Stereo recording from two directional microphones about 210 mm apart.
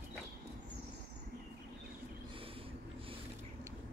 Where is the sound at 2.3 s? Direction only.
25° right (ahead or behind).